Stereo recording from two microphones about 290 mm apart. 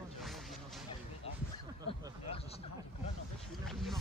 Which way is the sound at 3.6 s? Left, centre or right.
Centre.